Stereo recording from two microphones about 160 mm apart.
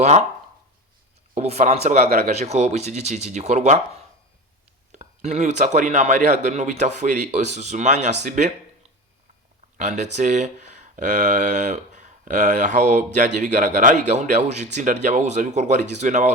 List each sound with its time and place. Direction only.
0.0 s speech: 45° right (ahead or behind)
1.4 s speech: 45° right (ahead or behind)
4.9 s speech: 45° right (ahead or behind)
9.7 s speech: 50° right (ahead or behind)